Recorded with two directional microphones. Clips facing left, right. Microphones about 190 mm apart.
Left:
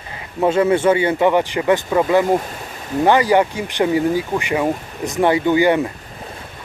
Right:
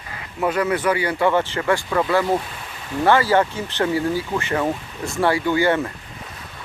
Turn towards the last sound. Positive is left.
turn(degrees=15)  # may be behind; listen again after turning